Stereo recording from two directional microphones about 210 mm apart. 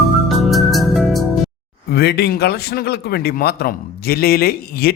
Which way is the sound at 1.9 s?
50° left (ahead or behind).